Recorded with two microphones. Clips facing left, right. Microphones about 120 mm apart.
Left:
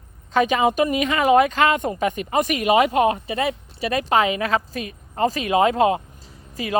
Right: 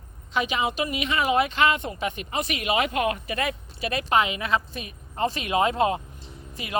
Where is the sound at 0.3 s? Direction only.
45° left (ahead or behind).